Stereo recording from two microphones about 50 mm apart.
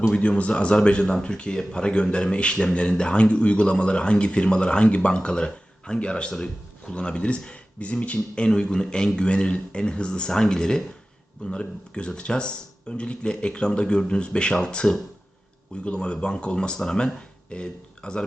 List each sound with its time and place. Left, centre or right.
0.0 s speech: left